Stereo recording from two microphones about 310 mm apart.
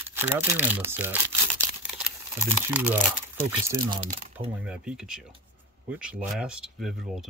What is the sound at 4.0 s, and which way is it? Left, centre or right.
Speech, right.